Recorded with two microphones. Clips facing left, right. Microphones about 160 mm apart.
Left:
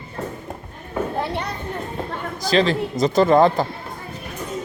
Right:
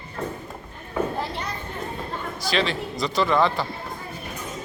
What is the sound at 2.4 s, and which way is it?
A man's voice, 40° left (ahead or behind).